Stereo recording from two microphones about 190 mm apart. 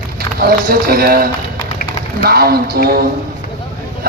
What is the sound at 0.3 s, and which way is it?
A man's voice, 50° right (ahead or behind).